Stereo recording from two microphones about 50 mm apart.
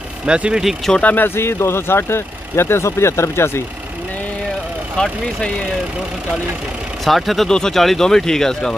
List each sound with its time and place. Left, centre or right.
0.2 s speech: right
1.0 s speech: left
1.3 s speech: left
4.9 s speech: centre
7.1 s speech: centre
7.4 s speech: centre